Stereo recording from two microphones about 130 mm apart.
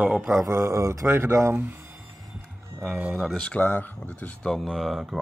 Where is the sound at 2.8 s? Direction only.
5° right (ahead or behind).